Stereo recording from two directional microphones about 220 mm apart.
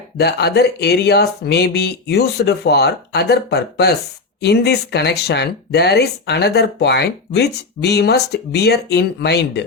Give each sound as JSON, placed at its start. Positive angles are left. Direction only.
{"t": 0.2, "sound": "speech", "side_deg": 50}